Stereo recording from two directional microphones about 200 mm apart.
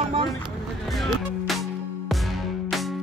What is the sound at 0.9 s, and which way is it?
Music, centre (ahead or behind).